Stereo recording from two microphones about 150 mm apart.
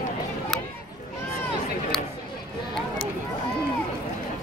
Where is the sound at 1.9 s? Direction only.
5° left (ahead or behind).